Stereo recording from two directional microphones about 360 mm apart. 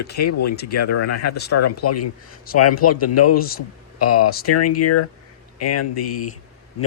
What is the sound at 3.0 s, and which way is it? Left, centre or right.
Speech, left.